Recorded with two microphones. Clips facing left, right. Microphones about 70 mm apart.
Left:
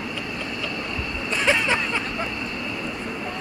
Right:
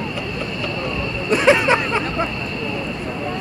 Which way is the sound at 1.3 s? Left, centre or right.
Right.